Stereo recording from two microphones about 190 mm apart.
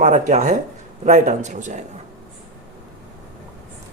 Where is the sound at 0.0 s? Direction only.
40° right (ahead or behind).